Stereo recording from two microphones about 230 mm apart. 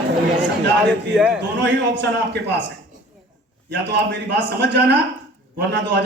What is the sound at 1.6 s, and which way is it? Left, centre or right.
A man's voice, right.